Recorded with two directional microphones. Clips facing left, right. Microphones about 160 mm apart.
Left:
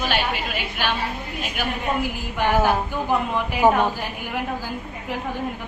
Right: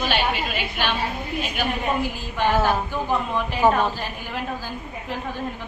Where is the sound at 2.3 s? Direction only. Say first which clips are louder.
Left 1 dB; 15° left (ahead or behind).